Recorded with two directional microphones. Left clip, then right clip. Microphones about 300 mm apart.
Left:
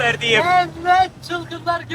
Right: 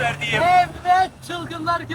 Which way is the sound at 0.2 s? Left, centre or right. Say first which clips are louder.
Right 2 dB; left.